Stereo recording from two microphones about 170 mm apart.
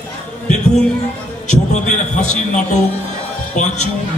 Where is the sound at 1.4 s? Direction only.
45° left (ahead or behind).